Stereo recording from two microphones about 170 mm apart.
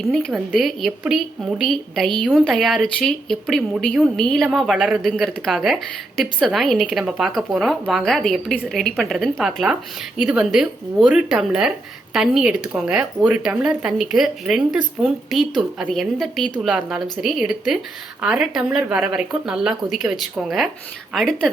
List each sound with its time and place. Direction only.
0.1 s a woman's voice: centre (ahead or behind)